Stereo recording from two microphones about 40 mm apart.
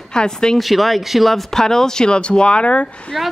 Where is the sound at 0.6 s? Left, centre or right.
Centre.